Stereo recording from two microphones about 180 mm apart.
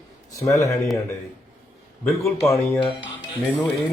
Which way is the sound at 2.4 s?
15° left (ahead or behind).